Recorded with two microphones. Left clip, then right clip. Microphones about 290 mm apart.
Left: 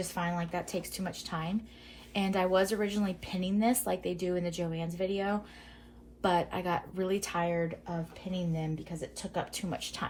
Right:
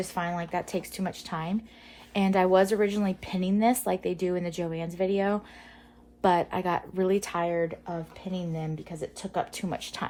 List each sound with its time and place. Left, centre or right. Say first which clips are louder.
0.0 s a woman's voice: right 4 dB; right